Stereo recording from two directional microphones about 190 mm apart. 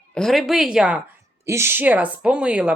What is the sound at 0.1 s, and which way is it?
Speech, centre (ahead or behind).